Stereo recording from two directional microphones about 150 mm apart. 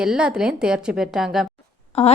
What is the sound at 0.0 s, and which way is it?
A woman's voice, 5° right (ahead or behind).